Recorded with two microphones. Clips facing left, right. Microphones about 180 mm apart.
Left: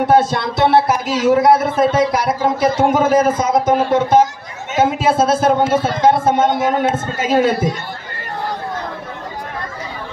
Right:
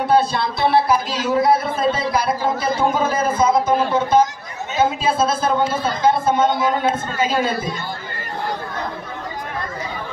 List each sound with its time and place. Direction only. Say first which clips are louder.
0.0 s a man's voice: left 3 dB; 80° left